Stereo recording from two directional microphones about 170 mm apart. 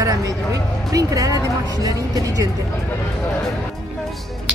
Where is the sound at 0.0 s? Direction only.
20° right (ahead or behind).